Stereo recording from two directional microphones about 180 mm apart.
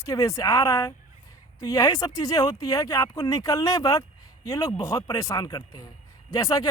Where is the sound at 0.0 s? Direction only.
20° left (ahead or behind).